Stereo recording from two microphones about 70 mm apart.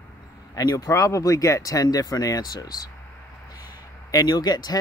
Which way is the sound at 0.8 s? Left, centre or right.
Left.